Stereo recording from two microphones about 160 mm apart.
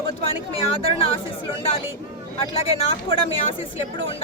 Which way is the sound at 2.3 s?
35° left (ahead or behind).